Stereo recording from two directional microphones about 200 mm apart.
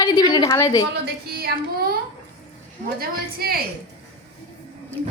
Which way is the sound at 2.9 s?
50° right (ahead or behind).